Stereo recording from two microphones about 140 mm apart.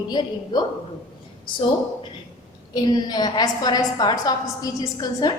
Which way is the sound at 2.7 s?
30° left (ahead or behind).